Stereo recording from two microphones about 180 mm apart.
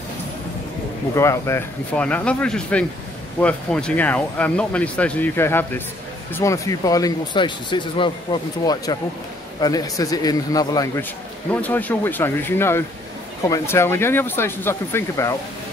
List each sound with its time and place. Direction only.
1.1 s speech: 15° left (ahead or behind)
11.5 s speech: 10° left (ahead or behind)